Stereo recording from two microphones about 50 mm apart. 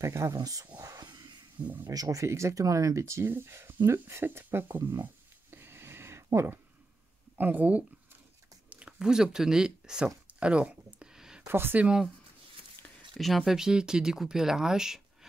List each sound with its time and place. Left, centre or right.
0.0 s speech: right
1.6 s speech: right
2.0 s speech: right
3.3 s speech: right
5.5 s a sound: right
7.3 s speech: right
8.6 s speech: centre
11.0 s a sound: centre
11.4 s speech: right
13.2 s speech: centre
13.5 s speech: centre